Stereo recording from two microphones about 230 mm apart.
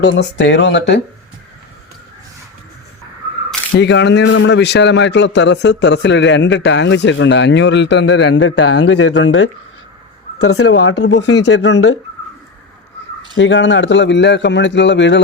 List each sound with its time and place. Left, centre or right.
0.0 s a man's voice: left
3.8 s a man's voice: left
10.3 s speech: left
10.7 s a man's voice: left
13.3 s a man's voice: left